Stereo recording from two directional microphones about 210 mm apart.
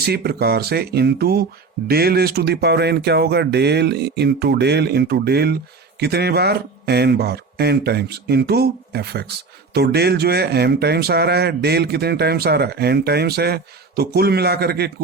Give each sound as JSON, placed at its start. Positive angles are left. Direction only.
{"t": 0.0, "sound": "a man's voice", "side_deg": -50}